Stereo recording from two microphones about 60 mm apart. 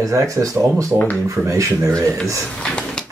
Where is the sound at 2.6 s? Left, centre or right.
Centre.